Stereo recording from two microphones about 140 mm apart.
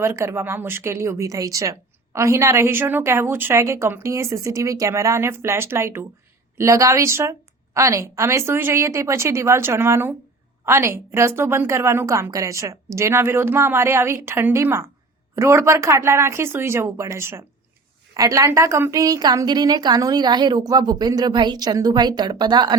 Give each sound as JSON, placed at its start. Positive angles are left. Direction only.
{"t": 0.0, "sound": "a woman's voice", "side_deg": -20}